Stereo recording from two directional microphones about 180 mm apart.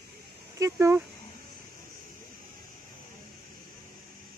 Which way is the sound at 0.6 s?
15° right (ahead or behind).